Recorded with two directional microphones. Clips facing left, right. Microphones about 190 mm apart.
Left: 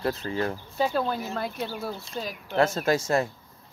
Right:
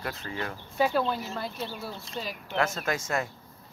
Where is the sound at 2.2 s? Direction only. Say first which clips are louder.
Left 5 dB; 40° left (ahead or behind).